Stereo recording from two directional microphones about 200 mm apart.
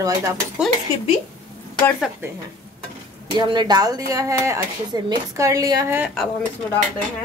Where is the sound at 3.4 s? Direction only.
20° right (ahead or behind).